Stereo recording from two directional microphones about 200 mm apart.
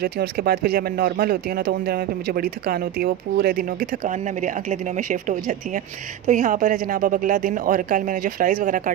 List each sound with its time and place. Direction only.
0.0 s a woman's voice: 50° right (ahead or behind)